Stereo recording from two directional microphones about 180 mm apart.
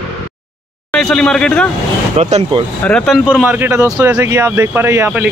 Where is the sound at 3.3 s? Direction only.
10° right (ahead or behind).